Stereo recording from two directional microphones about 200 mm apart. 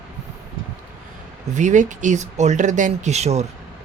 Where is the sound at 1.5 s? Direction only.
35° right (ahead or behind).